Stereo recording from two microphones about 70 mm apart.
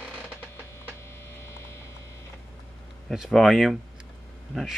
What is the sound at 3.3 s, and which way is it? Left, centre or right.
Speech, centre.